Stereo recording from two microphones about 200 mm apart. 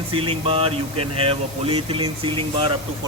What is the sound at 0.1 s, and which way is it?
Speech, 25° right (ahead or behind).